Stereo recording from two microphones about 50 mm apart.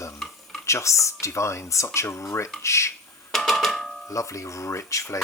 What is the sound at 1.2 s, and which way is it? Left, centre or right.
Speech, left.